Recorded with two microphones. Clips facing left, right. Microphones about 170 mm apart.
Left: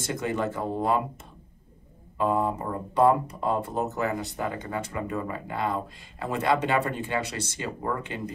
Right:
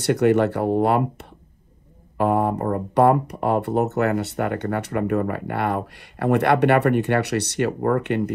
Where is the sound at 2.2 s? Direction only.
70° right (ahead or behind).